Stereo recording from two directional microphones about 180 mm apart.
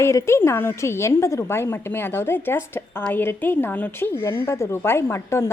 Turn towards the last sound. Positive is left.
turn(degrees=15)  # may be behind; listen again after turning